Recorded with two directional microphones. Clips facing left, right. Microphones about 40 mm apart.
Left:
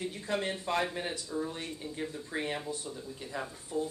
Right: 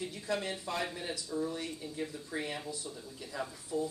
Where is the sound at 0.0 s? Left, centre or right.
Left.